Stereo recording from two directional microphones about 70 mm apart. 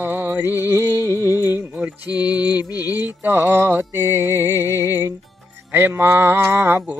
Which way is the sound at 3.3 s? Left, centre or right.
Right.